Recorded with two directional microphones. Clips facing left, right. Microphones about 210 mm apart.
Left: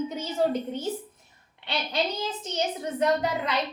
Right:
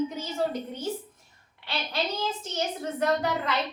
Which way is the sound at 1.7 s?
20° left (ahead or behind).